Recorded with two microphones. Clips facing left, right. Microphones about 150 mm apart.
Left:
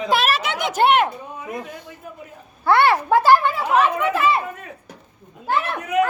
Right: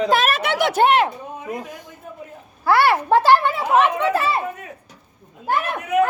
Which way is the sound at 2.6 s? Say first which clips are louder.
Even; 5° right (ahead or behind).